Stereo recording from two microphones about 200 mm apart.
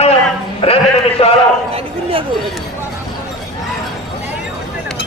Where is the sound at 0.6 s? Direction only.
30° left (ahead or behind).